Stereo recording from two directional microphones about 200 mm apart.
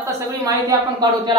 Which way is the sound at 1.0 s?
20° right (ahead or behind).